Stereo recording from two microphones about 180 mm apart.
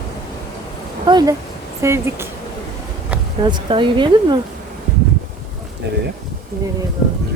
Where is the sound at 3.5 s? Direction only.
25° right (ahead or behind).